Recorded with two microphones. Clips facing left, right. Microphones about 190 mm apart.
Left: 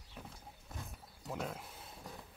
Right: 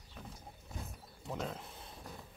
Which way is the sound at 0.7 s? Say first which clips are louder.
Right 2 dB; centre (ahead or behind).